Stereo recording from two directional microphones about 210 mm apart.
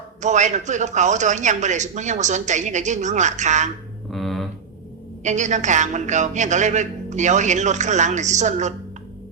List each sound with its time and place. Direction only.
0.2 s a man's voice: 35° right (ahead or behind)
4.1 s a sound: centre (ahead or behind)
5.2 s a man's voice: 35° right (ahead or behind)